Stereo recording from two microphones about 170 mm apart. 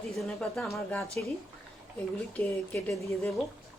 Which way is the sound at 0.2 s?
5° left (ahead or behind).